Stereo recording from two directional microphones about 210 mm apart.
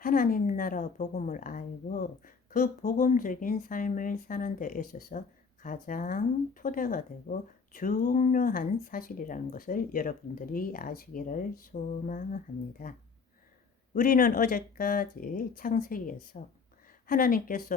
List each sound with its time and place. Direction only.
0.0 s a woman's voice: 40° left (ahead or behind)
13.9 s speech: 45° left (ahead or behind)